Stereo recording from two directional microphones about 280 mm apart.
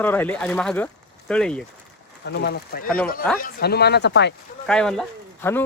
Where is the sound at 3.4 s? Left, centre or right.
Left.